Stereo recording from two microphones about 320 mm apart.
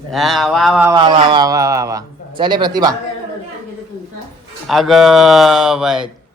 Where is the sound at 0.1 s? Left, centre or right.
Centre.